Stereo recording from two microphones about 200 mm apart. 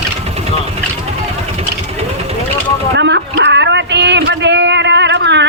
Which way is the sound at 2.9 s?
60° right (ahead or behind).